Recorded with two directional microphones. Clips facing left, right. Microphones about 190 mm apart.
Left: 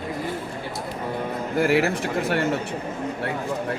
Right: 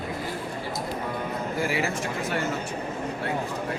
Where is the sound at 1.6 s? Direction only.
65° left (ahead or behind).